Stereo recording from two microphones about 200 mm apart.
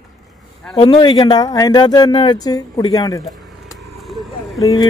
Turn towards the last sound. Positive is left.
turn(degrees=15)  # may be behind; listen again after turning